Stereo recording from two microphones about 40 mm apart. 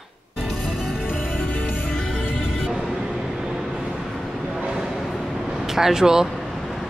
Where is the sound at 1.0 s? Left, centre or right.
Left.